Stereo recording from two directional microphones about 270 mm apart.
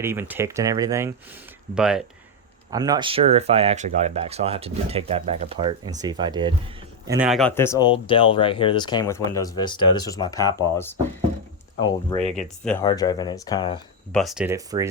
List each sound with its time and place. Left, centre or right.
0.0 s speech: centre
2.6 s speech: centre
7.1 s speech: centre
12.1 s speech: centre
12.8 s speech: centre
14.1 s speech: centre